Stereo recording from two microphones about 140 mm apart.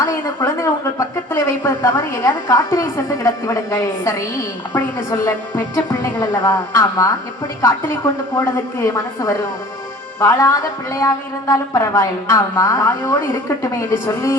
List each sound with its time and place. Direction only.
0.0 s a woman's voice: 20° left (ahead or behind)